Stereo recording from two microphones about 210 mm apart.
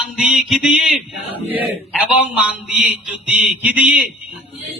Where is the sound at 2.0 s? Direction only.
5° right (ahead or behind).